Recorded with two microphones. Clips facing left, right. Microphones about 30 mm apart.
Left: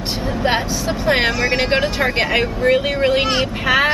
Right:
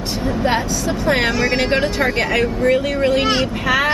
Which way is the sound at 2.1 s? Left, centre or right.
Left.